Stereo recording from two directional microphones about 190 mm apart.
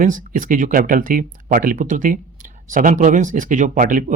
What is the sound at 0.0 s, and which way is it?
Speech, 45° right (ahead or behind).